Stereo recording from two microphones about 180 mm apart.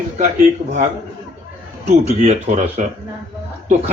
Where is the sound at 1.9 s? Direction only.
35° right (ahead or behind).